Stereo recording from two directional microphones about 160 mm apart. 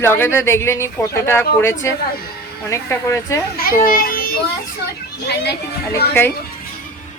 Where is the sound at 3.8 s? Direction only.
65° left (ahead or behind).